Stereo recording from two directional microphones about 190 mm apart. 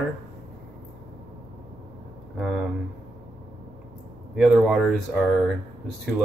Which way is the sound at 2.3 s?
5° right (ahead or behind).